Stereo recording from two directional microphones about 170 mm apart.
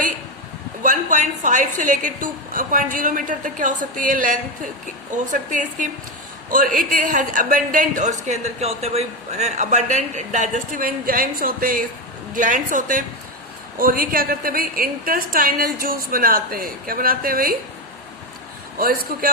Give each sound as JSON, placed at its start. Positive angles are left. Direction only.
{"t": 0.8, "sound": "a man's voice", "side_deg": -50}
{"t": 18.8, "sound": "a woman's voice", "side_deg": -60}